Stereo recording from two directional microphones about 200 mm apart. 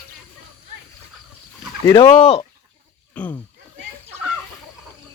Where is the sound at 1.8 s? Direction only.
20° left (ahead or behind).